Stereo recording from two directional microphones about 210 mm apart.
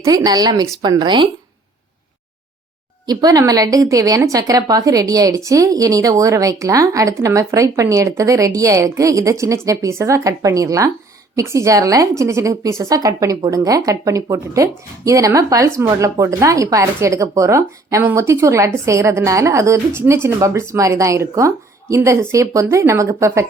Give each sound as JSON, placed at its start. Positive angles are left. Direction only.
{"t": 0.0, "sound": "speech", "side_deg": -15}
{"t": 3.1, "sound": "a woman's voice", "side_deg": -20}